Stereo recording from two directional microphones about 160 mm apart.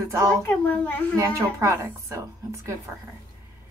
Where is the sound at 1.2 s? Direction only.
20° right (ahead or behind).